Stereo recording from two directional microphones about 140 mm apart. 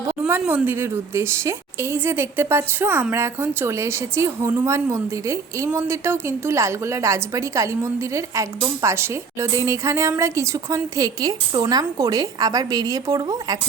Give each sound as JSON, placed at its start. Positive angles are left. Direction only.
{"t": 0.2, "sound": "a woman's voice", "side_deg": -10}